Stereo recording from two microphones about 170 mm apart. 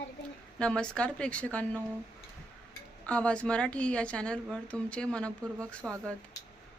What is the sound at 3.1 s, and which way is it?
A woman's voice, 5° left (ahead or behind).